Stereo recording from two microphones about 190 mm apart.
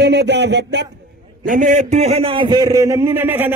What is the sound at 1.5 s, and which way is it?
A man's voice, 40° right (ahead or behind).